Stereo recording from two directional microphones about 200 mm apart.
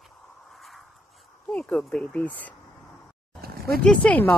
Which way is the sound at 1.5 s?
5° left (ahead or behind).